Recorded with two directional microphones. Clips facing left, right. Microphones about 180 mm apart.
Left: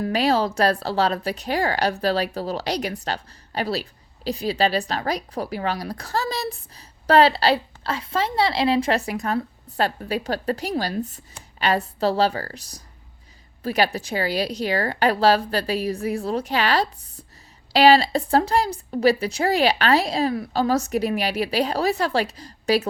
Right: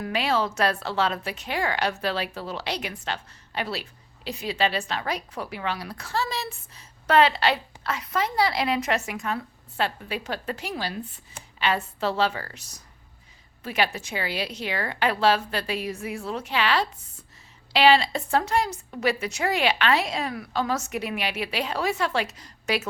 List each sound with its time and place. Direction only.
0.0 s a woman's voice: 35° left (ahead or behind)